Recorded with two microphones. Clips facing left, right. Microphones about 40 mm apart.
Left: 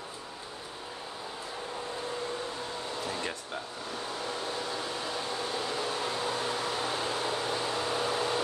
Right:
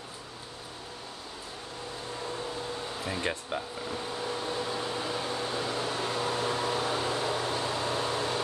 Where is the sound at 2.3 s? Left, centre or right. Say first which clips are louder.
Right 1 dB; centre.